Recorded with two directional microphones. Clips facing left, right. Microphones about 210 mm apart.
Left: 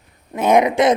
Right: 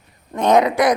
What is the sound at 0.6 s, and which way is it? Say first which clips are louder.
Speech: left 1 dB; 25° left (ahead or behind).